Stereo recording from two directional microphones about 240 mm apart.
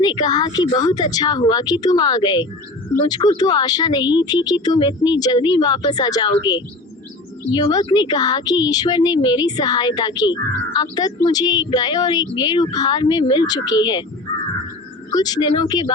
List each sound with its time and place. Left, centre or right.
0.0 s a woman's voice: centre
15.1 s speech: centre